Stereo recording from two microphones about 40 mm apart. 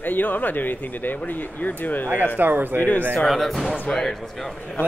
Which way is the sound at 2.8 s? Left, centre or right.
Left.